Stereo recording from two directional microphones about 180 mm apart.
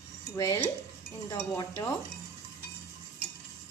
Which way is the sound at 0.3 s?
15° left (ahead or behind).